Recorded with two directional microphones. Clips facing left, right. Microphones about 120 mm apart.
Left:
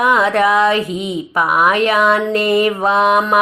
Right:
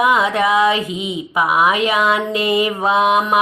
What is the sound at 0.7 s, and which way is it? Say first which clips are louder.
Mantra: left 3 dB; 40° left (ahead or behind).